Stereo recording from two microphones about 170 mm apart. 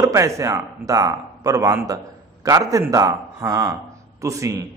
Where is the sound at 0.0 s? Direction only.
20° right (ahead or behind).